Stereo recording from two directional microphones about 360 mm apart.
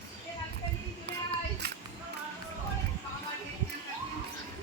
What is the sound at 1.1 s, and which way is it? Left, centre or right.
Child singing, right.